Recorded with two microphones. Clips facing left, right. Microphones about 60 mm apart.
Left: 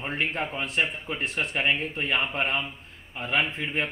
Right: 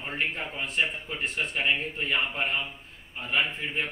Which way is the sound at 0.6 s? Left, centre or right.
Left.